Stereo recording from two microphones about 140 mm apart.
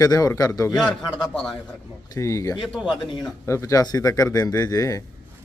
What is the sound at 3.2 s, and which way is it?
Speech, 20° left (ahead or behind).